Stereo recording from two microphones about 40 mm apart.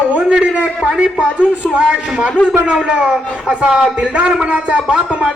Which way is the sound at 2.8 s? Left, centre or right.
Right.